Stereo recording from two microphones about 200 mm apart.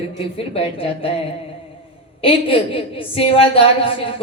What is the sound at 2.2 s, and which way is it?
A woman's voice, 25° left (ahead or behind).